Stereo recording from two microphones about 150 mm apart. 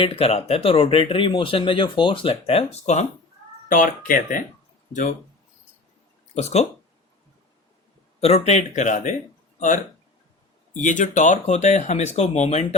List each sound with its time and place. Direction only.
0.0 s speech: 40° left (ahead or behind)
3.7 s speech: 65° left (ahead or behind)
6.3 s speech: 45° left (ahead or behind)
8.2 s speech: 45° left (ahead or behind)